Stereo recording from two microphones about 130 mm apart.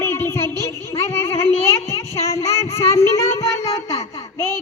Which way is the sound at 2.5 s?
20° left (ahead or behind).